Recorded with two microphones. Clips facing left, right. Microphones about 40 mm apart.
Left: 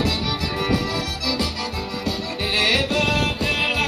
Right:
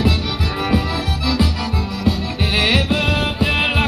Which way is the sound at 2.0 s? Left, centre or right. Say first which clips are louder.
Right 6 dB; centre.